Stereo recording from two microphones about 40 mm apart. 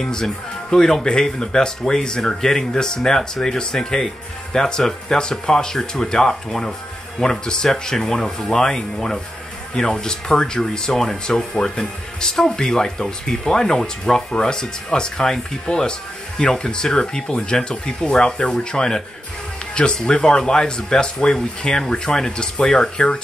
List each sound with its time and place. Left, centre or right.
0.0 s speech: centre